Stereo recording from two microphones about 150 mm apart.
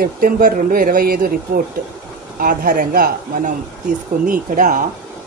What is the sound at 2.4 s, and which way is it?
Speech, 70° right (ahead or behind).